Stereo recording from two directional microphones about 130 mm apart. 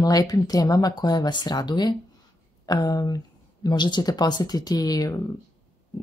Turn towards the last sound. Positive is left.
turn(degrees=25)  # may be behind; listen again after turning